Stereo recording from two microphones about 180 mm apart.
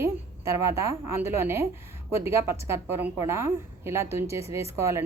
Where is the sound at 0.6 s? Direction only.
15° right (ahead or behind).